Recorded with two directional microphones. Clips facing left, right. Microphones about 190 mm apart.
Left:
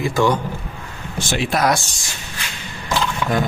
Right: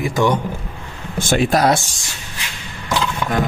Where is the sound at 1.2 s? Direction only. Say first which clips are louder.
Right 5 dB; 50° right (ahead or behind).